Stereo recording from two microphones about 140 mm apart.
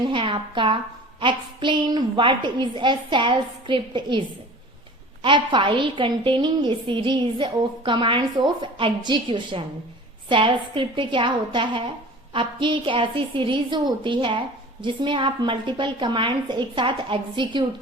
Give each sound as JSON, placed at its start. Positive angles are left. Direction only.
{"t": 0.0, "sound": "a woman's voice", "side_deg": -35}
{"t": 5.2, "sound": "a woman's voice", "side_deg": -35}